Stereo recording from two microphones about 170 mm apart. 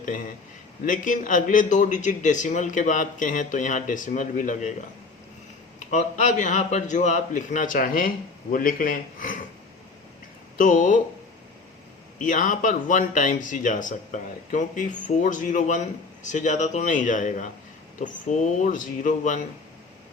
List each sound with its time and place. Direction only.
0.9 s a man's voice: 50° left (ahead or behind)
5.9 s a man's voice: 45° left (ahead or behind)
10.6 s a man's voice: 50° left (ahead or behind)
12.2 s a man's voice: 50° left (ahead or behind)